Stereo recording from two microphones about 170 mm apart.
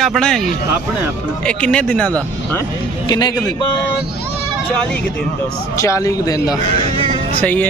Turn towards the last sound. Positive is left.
turn(degrees=10)  # may be behind; listen again after turning